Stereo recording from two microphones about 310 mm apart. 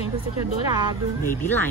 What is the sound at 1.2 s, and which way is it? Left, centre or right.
Speech, centre.